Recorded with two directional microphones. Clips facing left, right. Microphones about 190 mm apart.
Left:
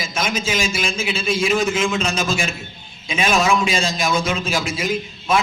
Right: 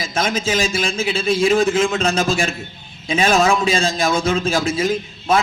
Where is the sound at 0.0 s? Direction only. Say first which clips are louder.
Right 3 dB; 35° right (ahead or behind).